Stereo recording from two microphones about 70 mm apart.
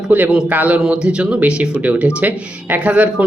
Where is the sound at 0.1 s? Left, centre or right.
Right.